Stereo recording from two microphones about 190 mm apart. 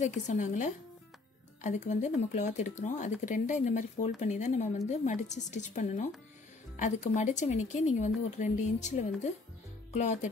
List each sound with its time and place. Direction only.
0.0 s speech: 40° left (ahead or behind)